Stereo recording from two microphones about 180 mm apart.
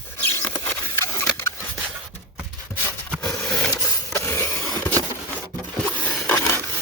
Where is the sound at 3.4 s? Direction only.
5° left (ahead or behind).